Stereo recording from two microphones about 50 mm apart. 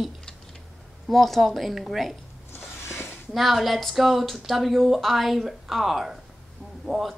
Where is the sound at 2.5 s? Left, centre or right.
Left.